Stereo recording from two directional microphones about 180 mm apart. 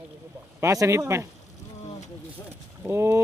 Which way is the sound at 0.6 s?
15° right (ahead or behind).